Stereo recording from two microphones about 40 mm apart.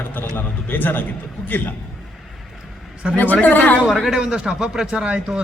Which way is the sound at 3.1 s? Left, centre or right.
Left.